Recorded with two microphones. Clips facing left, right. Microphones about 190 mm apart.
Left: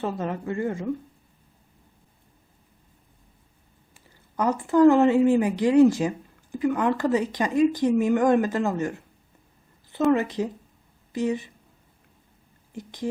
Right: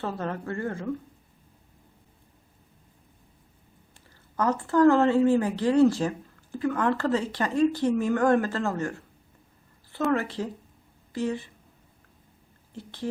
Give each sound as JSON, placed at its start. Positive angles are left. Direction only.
{"t": 0.0, "sound": "speech", "side_deg": 15}
{"t": 4.4, "sound": "speech", "side_deg": 15}
{"t": 10.1, "sound": "speech", "side_deg": 20}
{"t": 12.7, "sound": "speech", "side_deg": 15}